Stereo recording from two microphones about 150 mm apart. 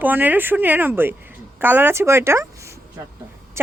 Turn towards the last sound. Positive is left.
turn(degrees=-15)  # may be behind; listen again after turning